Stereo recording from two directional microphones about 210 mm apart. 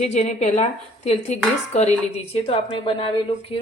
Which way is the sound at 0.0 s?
30° left (ahead or behind).